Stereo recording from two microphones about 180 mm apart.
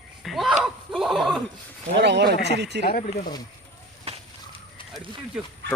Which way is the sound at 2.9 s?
55° left (ahead or behind).